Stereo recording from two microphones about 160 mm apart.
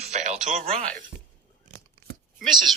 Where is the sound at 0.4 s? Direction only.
45° right (ahead or behind).